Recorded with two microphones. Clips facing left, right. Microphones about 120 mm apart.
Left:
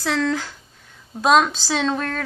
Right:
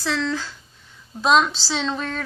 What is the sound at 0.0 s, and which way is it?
A woman's voice, 55° left (ahead or behind).